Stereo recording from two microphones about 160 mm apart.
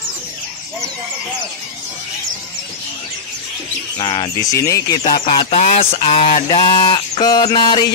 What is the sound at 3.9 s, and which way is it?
Speech, 30° left (ahead or behind).